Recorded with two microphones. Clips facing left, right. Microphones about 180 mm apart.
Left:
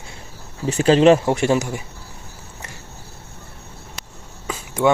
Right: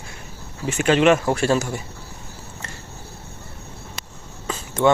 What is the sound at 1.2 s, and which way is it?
Speech, 20° left (ahead or behind).